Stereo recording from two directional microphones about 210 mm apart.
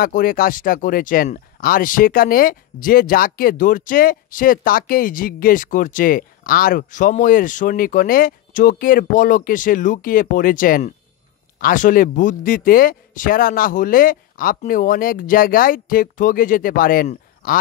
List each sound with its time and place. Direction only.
0.0 s speech: 40° left (ahead or behind)